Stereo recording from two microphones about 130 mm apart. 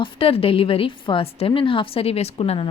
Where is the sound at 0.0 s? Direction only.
45° left (ahead or behind).